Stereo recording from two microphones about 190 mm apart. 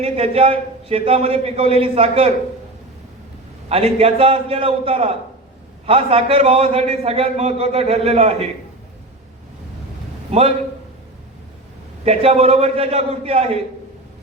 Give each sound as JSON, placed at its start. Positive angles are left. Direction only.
{"t": 0.0, "sound": "a man's voice", "side_deg": -30}
{"t": 3.7, "sound": "a man's voice", "side_deg": -30}
{"t": 10.3, "sound": "a man's voice", "side_deg": -30}
{"t": 12.0, "sound": "a man's voice", "side_deg": -30}